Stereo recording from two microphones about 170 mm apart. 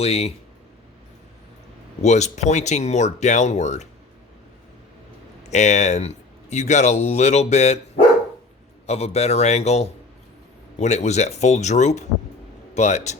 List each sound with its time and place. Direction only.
0.0 s speech: 40° left (ahead or behind)
2.0 s speech: 40° left (ahead or behind)
5.4 s speech: 40° left (ahead or behind)